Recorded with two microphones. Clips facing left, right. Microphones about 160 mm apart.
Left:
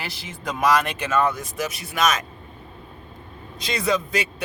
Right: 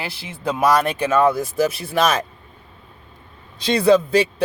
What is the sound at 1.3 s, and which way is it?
Speech, 30° right (ahead or behind).